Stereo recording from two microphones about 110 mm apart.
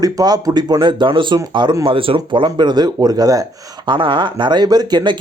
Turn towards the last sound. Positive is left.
turn(degrees=-40)  # may be behind; listen again after turning